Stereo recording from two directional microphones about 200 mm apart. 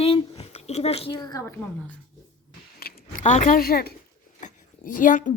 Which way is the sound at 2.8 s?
50° left (ahead or behind).